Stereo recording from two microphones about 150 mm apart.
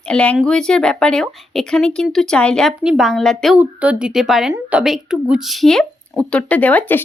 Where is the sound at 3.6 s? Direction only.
10° right (ahead or behind); by 7.0 s 10° left (ahead or behind).